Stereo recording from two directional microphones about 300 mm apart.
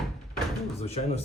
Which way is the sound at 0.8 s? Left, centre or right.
Centre.